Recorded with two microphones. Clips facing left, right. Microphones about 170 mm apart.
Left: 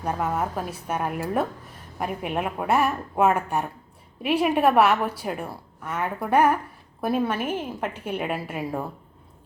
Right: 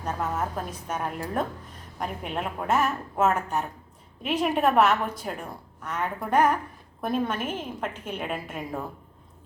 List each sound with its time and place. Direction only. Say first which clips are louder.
0.0 s a woman's voice: left 3 dB; 10° left (ahead or behind)